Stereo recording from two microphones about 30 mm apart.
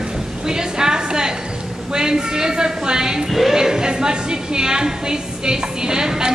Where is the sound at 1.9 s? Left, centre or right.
Right.